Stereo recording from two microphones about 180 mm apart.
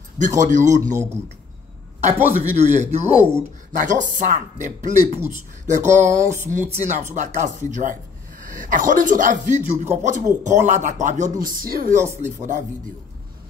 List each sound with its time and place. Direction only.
0.2 s speech: 45° right (ahead or behind)
2.5 s speech: 40° right (ahead or behind)
11.4 s speech: 55° right (ahead or behind)